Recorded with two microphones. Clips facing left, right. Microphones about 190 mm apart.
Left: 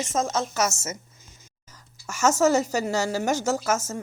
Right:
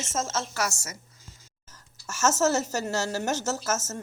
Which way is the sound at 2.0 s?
15° left (ahead or behind).